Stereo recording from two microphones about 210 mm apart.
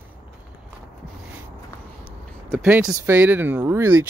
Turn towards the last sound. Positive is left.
turn(degrees=-10)  # may be behind; listen again after turning